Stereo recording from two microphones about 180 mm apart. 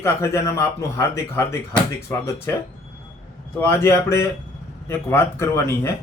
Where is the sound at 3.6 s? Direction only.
15° left (ahead or behind).